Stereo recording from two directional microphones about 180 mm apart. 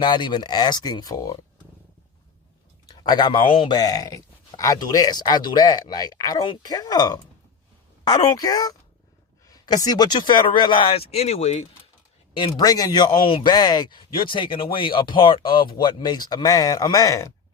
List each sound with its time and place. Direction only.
0.0 s speech: 25° left (ahead or behind)
2.8 s speech: 25° left (ahead or behind)